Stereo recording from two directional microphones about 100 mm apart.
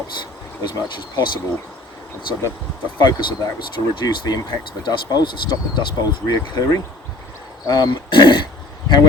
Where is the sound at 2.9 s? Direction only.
45° left (ahead or behind).